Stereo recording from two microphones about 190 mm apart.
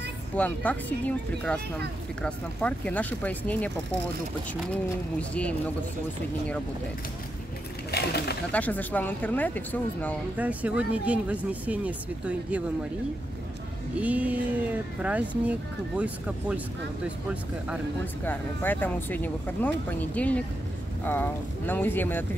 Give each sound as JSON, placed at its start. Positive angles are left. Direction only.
{"t": 0.4, "sound": "speech", "side_deg": 10}
{"t": 5.3, "sound": "speech", "side_deg": 5}
{"t": 7.9, "sound": "speech", "side_deg": 60}
{"t": 8.5, "sound": "speech", "side_deg": 10}
{"t": 10.3, "sound": "speech", "side_deg": -10}
{"t": 13.9, "sound": "speech", "side_deg": -5}
{"t": 18.2, "sound": "speech", "side_deg": 10}